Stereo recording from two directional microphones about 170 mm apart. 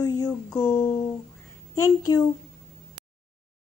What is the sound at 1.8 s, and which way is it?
Speech, 20° left (ahead or behind).